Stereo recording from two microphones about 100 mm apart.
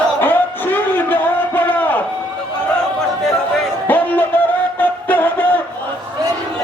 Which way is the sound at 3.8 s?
20° left (ahead or behind).